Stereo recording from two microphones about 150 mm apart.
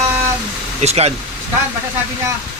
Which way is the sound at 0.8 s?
45° right (ahead or behind).